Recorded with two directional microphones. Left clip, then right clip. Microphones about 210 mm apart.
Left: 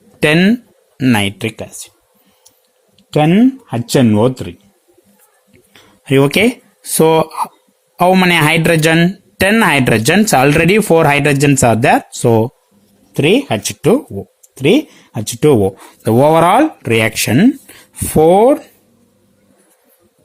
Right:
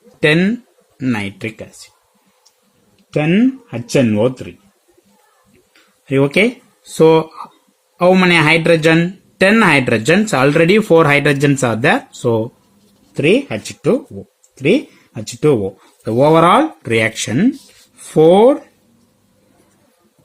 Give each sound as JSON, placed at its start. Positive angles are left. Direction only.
{"t": 0.2, "sound": "speech", "side_deg": 40}
{"t": 3.1, "sound": "speech", "side_deg": 35}
{"t": 5.7, "sound": "a sound", "side_deg": 40}
{"t": 6.9, "sound": "speech", "side_deg": 40}